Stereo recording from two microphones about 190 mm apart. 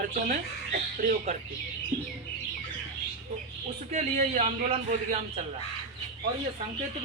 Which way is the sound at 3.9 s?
40° right (ahead or behind).